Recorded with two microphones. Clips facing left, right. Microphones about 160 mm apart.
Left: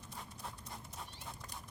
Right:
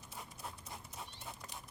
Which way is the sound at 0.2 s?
5° right (ahead or behind).